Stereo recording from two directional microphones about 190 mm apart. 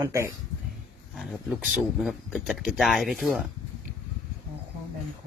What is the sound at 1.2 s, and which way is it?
Speech, centre (ahead or behind).